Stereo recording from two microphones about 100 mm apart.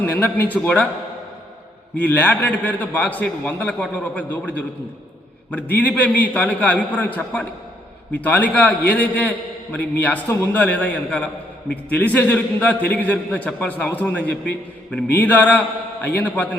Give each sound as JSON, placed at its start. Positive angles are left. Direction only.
{"t": 0.0, "sound": "a man's voice", "side_deg": 15}
{"t": 2.0, "sound": "a man's voice", "side_deg": 15}